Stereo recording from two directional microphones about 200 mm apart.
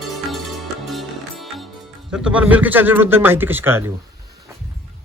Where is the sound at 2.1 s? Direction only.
5° right (ahead or behind).